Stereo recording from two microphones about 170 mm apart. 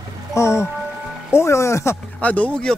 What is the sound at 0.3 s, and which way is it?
Speech, 15° left (ahead or behind).